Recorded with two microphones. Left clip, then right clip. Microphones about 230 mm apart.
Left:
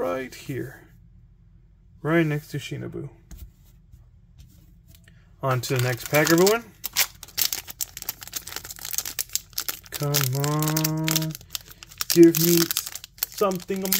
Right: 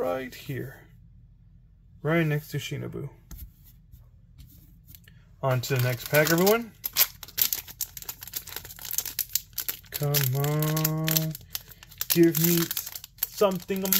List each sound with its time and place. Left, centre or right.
0.0 s speech: centre
2.0 s speech: centre
5.4 s speech: centre
6.0 s speech: centre
6.4 s a sound: centre
7.3 s crumpling: centre